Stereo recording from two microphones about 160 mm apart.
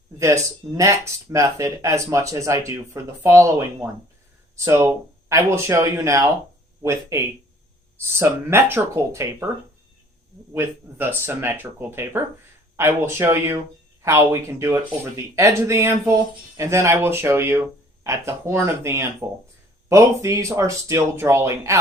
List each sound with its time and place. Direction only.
0.2 s speech: 20° right (ahead or behind)
10.5 s speech: 15° right (ahead or behind)